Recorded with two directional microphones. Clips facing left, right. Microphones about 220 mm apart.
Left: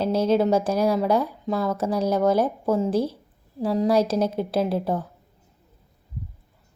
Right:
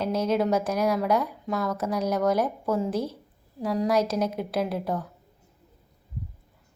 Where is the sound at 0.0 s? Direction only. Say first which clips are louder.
Left 4 dB; 30° left (ahead or behind).